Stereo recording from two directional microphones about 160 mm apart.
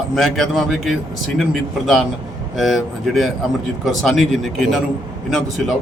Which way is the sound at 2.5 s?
Centre (ahead or behind).